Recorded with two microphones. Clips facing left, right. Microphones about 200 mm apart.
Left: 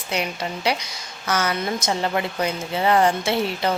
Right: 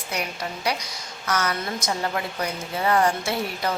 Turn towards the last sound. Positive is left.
turn(degrees=25)  # may be behind; listen again after turning